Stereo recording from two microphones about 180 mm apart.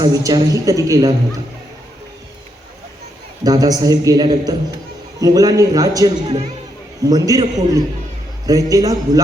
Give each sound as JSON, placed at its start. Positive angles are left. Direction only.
{"t": 0.0, "sound": "a man's voice", "side_deg": -20}
{"t": 3.4, "sound": "a man's voice", "side_deg": -20}